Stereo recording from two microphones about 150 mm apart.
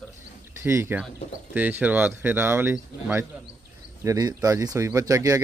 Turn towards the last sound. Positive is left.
turn(degrees=-20)  # may be behind; listen again after turning